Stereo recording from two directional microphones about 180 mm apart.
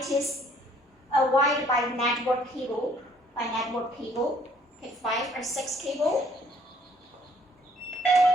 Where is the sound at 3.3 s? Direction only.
Centre (ahead or behind).